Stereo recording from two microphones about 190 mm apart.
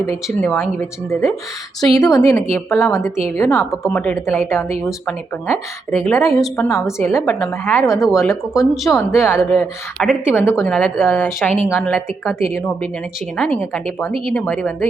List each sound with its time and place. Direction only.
0.4 s a woman's voice: 10° left (ahead or behind)
2.0 s a woman's voice: 15° left (ahead or behind)
6.3 s speech: centre (ahead or behind)
7.0 s a woman's voice: 10° left (ahead or behind)
8.7 s speech: centre (ahead or behind)
9.0 s a woman's voice: 15° left (ahead or behind)